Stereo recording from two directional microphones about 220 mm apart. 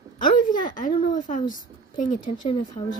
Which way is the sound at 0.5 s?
40° left (ahead or behind).